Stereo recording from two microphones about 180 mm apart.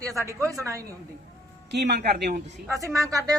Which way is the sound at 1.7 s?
70° right (ahead or behind).